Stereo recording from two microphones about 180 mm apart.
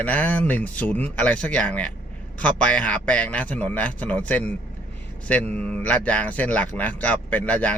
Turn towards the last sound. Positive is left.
turn(degrees=10)  # may be behind; listen again after turning